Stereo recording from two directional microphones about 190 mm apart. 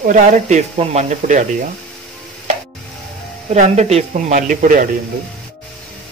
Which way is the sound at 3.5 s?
35° right (ahead or behind).